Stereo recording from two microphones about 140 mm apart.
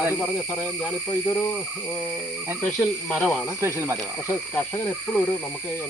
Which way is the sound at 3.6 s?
20° right (ahead or behind).